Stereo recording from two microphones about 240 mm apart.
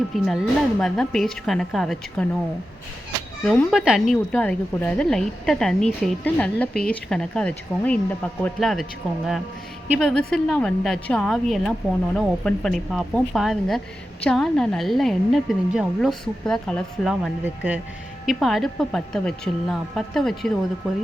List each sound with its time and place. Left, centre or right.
0.1 s a woman's voice: centre
3.4 s a woman's voice: centre